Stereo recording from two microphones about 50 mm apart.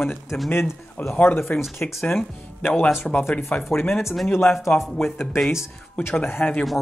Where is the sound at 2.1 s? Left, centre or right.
Centre.